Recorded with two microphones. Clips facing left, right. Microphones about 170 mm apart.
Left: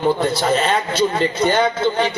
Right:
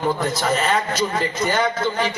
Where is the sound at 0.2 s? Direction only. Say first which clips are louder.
Left 3 dB; 30° left (ahead or behind).